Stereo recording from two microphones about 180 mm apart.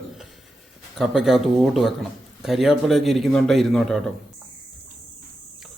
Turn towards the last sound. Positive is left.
turn(degrees=0)  # may be behind; listen again after turning